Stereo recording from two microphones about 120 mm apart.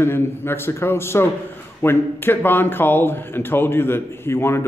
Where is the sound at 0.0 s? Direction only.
20° left (ahead or behind).